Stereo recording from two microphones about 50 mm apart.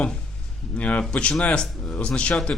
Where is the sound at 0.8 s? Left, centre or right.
Left.